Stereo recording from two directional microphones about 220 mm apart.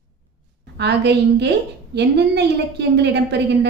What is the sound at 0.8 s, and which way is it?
A woman's voice, 50° right (ahead or behind).